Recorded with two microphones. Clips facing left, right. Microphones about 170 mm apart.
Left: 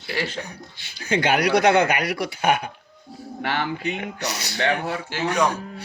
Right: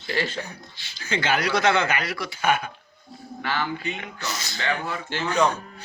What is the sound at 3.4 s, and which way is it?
Speech, 60° left (ahead or behind).